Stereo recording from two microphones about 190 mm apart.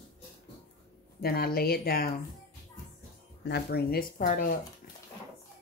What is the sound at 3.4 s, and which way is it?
Speech, 60° left (ahead or behind).